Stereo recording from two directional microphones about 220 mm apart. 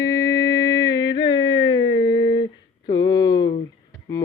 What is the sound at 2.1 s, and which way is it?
Humming, 45° left (ahead or behind).